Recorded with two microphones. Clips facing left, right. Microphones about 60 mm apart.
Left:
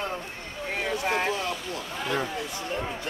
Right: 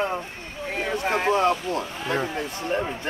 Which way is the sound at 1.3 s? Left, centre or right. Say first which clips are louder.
Right 10 dB; right.